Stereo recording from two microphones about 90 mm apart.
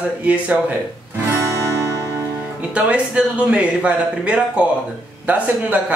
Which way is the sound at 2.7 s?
15° right (ahead or behind).